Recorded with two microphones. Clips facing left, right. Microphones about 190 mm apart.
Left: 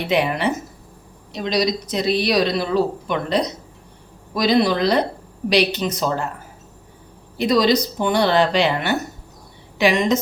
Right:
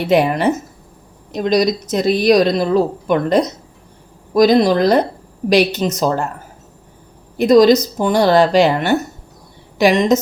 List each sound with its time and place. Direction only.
0.1 s speech: 45° right (ahead or behind)
7.3 s speech: 50° right (ahead or behind)